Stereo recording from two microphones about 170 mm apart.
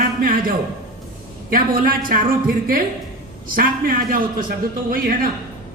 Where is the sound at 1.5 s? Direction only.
55° right (ahead or behind).